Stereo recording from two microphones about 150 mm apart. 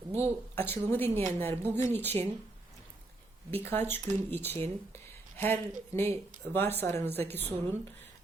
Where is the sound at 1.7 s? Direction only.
50° right (ahead or behind).